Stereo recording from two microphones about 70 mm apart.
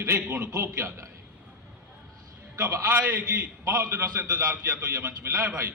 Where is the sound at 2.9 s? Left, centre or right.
Right.